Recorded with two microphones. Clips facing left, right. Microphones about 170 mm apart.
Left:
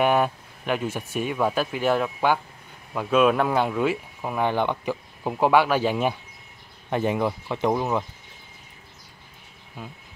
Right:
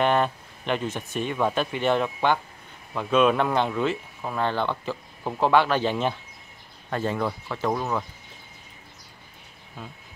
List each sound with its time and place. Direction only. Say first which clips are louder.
0.0 s speech: left 1 dB; 10° left (ahead or behind)
9.8 s speech: left 1 dB; 10° left (ahead or behind)